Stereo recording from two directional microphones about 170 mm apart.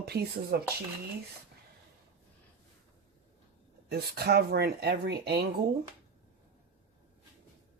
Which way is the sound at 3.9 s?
70° right (ahead or behind).